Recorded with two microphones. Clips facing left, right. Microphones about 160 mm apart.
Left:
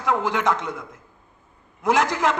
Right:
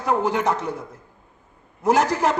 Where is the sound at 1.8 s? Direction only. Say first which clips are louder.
Right 2 dB; 35° right (ahead or behind).